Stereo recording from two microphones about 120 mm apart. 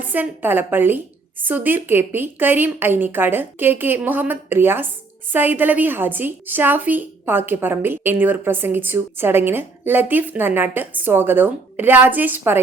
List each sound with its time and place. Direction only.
0.0 s a woman's voice: 15° right (ahead or behind)